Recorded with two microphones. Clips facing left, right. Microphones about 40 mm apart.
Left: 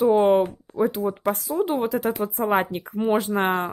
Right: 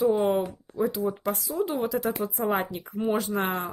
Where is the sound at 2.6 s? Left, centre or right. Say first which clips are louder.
Left 4 dB; left.